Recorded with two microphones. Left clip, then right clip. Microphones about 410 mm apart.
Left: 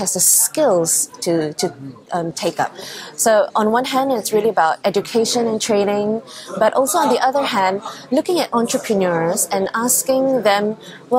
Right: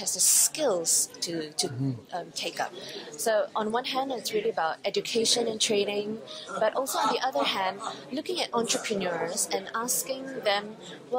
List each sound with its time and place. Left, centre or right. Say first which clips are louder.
0.0 s a woman's voice: left 7 dB; left